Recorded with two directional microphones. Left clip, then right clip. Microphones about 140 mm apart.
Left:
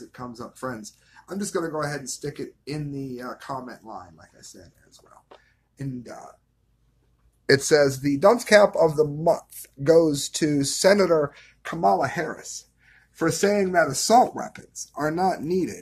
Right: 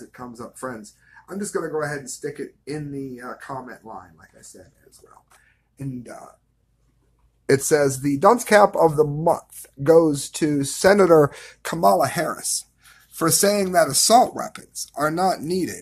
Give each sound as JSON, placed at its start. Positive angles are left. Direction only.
{"t": 0.1, "sound": "speech", "side_deg": 0}
{"t": 5.8, "sound": "speech", "side_deg": 5}
{"t": 7.4, "sound": "speech", "side_deg": -10}
{"t": 11.1, "sound": "speech", "side_deg": -70}
{"t": 11.8, "sound": "speech", "side_deg": -40}
{"t": 13.1, "sound": "speech", "side_deg": -30}
{"t": 13.8, "sound": "speech", "side_deg": -15}